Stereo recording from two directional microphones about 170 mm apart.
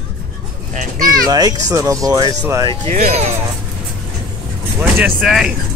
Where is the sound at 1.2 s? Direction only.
20° right (ahead or behind).